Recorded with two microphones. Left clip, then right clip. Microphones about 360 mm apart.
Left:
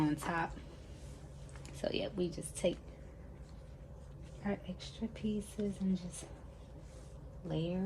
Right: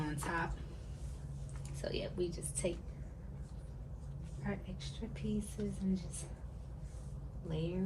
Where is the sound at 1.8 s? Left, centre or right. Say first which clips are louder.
Left 2 dB; left.